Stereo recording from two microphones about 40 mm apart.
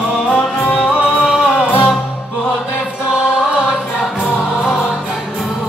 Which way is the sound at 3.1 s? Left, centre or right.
Centre.